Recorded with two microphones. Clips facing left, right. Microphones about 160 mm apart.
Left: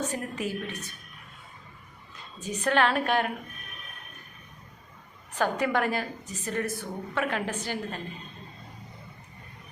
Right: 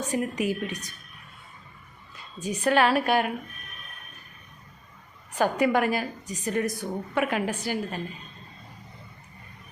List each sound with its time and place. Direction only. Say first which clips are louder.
0.0 s a woman's voice: right 4 dB; 10° right (ahead or behind)
2.1 s a woman's voice: right 3 dB; 10° right (ahead or behind)
5.3 s a woman's voice: right 4 dB; 10° right (ahead or behind)